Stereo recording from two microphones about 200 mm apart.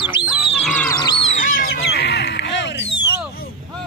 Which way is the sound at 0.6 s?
5° left (ahead or behind).